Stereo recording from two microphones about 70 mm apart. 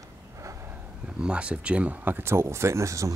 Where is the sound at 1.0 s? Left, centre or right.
Centre.